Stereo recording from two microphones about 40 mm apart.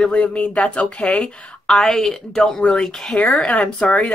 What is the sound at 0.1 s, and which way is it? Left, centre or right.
Speech, left.